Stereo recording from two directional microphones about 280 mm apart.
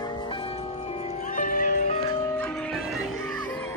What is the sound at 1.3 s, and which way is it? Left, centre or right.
Music, left.